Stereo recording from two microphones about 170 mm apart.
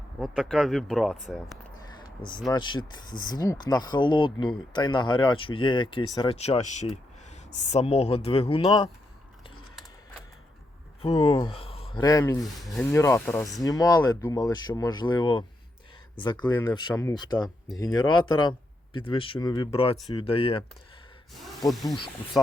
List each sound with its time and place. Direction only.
0.2 s speech: centre (ahead or behind)
2.0 s speech: 25° left (ahead or behind)
11.0 s speech: 35° left (ahead or behind)
12.0 s speech: 20° left (ahead or behind)
12.4 s speech: centre (ahead or behind)
12.8 s speech: 15° left (ahead or behind)
13.7 s speech: 20° left (ahead or behind)
21.7 s speech: centre (ahead or behind)